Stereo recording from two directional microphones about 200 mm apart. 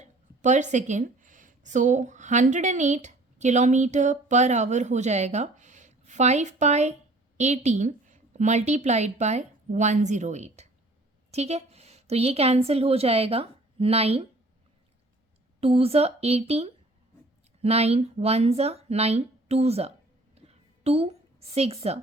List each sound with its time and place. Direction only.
0.0 s a woman's voice: 35° right (ahead or behind)
15.6 s a woman's voice: 30° right (ahead or behind)
20.3 s a sound: 30° right (ahead or behind)